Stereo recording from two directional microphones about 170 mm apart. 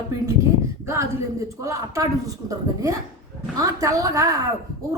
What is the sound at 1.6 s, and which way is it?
A woman's voice, 20° right (ahead or behind).